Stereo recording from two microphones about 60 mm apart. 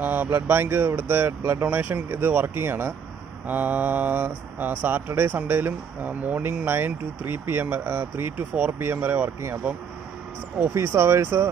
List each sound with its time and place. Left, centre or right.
0.0 s speech: right
3.4 s mantra: right
4.6 s speech: right
6.0 s mantra: right
6.4 s speech: right
10.7 s speech: right